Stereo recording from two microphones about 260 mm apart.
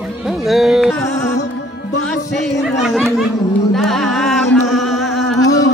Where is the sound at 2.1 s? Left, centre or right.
Centre.